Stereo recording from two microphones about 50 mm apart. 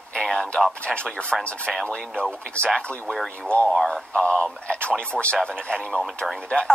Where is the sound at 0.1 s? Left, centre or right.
Centre.